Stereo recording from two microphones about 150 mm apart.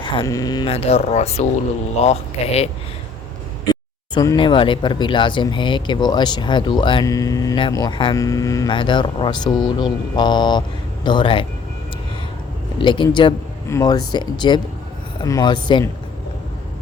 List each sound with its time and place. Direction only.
0.0 s speech: 30° left (ahead or behind)
0.7 s speech: 40° left (ahead or behind)
3.7 s speech: 25° left (ahead or behind)
12.8 s speech: 30° left (ahead or behind)